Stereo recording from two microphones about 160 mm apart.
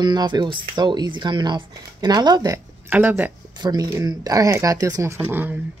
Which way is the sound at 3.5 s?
25° right (ahead or behind).